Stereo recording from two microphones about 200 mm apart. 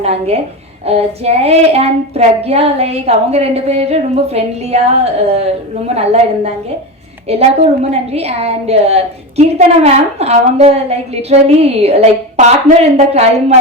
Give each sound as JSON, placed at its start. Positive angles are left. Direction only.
{"t": 0.0, "sound": "a woman's voice", "side_deg": -30}